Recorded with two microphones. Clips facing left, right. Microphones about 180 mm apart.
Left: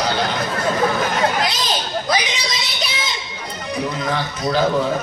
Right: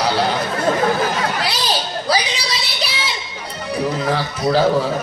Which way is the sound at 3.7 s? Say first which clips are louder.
Right 3 dB; 30° right (ahead or behind).